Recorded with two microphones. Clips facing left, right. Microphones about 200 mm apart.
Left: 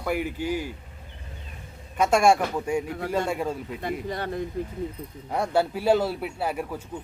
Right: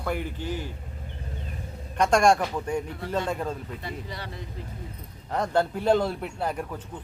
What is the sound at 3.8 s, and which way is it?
Speech, 50° left (ahead or behind).